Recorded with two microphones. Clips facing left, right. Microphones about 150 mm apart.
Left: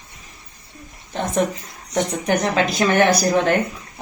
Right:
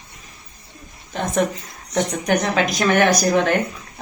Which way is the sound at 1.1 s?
10° left (ahead or behind).